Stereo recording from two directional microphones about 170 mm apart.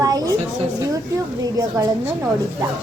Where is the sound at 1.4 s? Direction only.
20° right (ahead or behind).